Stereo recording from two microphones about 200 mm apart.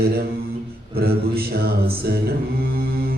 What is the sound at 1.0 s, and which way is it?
Music, 50° right (ahead or behind).